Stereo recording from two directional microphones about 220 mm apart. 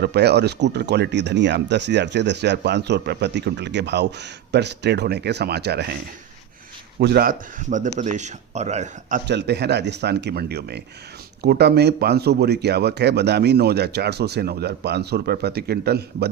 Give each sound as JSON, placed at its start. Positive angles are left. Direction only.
{"t": 0.0, "sound": "speech", "side_deg": -50}
{"t": 7.0, "sound": "speech", "side_deg": -45}
{"t": 9.2, "sound": "speech", "side_deg": -50}